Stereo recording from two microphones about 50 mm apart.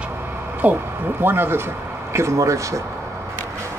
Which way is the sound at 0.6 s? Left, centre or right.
Right.